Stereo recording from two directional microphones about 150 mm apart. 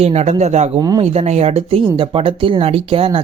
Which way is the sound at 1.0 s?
45° right (ahead or behind).